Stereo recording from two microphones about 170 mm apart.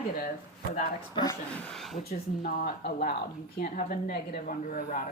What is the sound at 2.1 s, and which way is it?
A woman's voice, 60° left (ahead or behind).